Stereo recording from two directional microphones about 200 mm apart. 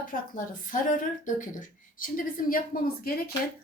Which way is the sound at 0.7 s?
40° left (ahead or behind).